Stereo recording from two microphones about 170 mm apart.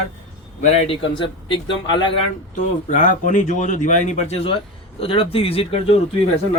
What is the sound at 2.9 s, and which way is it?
A man's voice, 50° left (ahead or behind).